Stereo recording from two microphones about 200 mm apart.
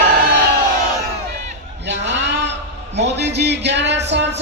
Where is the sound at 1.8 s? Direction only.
60° right (ahead or behind).